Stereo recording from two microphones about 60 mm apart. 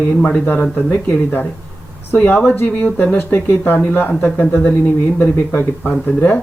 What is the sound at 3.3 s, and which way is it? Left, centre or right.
Speech, left.